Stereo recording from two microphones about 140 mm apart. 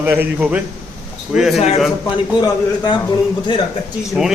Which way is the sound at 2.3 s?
30° left (ahead or behind).